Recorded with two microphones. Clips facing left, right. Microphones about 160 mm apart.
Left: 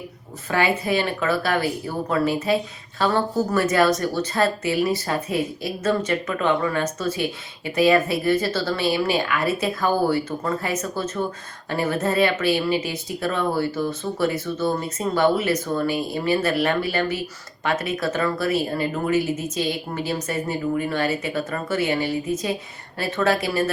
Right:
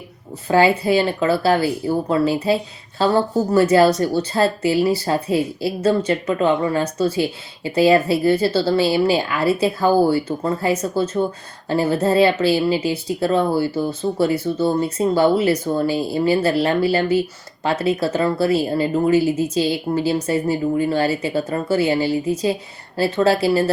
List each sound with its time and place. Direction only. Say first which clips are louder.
0.4 s speech: right 6 dB; 30° right (ahead or behind)